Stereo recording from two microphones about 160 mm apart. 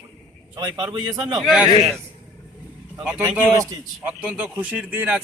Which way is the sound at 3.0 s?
10° right (ahead or behind).